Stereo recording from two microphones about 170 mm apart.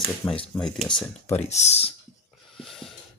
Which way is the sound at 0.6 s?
5° left (ahead or behind).